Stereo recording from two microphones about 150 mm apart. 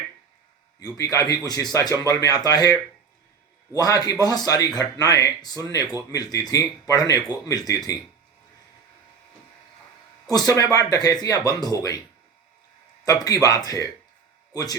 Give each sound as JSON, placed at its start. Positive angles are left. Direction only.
{"t": 0.9, "sound": "speech", "side_deg": 25}
{"t": 10.2, "sound": "speech", "side_deg": 25}
{"t": 13.1, "sound": "speech", "side_deg": 25}